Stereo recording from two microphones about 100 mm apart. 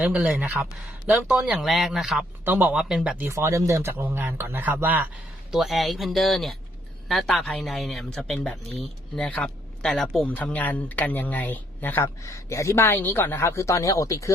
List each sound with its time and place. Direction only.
0.0 s speech: 10° right (ahead or behind)
2.4 s speech: 20° right (ahead or behind)
2.7 s speech: 10° right (ahead or behind)
3.2 s speech: 30° right (ahead or behind)
5.5 s speech: 5° right (ahead or behind)
10.2 s speech: 15° left (ahead or behind); by 14.3 s 30° left (ahead or behind)